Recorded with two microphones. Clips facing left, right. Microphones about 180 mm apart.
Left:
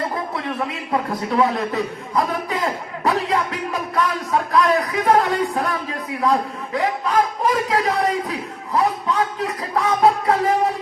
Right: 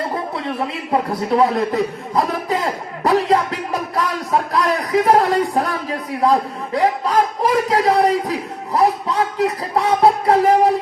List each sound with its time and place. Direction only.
1.3 s speech: 35° right (ahead or behind)
3.0 s music: 35° right (ahead or behind)
3.9 s speech: 35° right (ahead or behind)